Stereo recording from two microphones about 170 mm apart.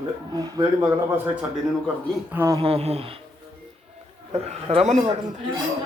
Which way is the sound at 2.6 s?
35° right (ahead or behind).